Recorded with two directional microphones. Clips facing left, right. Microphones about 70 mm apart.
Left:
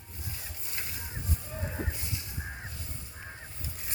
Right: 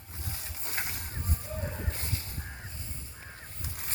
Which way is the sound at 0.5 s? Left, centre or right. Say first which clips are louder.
Right 8 dB; right.